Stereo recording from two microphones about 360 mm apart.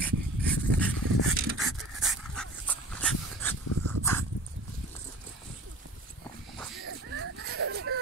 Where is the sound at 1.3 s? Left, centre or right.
Right.